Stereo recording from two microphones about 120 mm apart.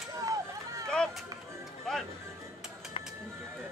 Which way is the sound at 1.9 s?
5° left (ahead or behind).